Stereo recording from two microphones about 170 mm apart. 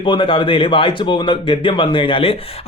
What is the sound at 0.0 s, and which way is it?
Speech, 30° left (ahead or behind).